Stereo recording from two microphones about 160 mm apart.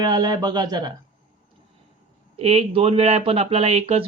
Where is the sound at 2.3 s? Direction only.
40° right (ahead or behind).